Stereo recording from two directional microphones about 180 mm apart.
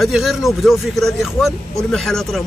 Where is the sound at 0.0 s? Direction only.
Centre (ahead or behind).